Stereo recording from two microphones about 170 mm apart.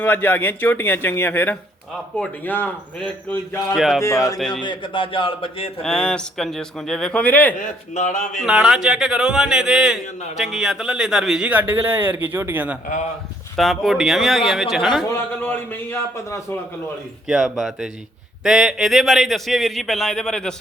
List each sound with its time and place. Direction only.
0.0 s a man's voice: 10° left (ahead or behind)
3.8 s speech: centre (ahead or behind)
4.0 s speech: 20° left (ahead or behind)
4.4 s speech: 5° left (ahead or behind)
4.6 s a man's voice: 30° left (ahead or behind)
5.8 s speech: 5° left (ahead or behind)
7.6 s speech: 45° left (ahead or behind)
8.3 s speech: centre (ahead or behind)
13.6 s speech: centre (ahead or behind)
15.4 s a man's voice: 10° left (ahead or behind)
17.2 s speech: centre (ahead or behind)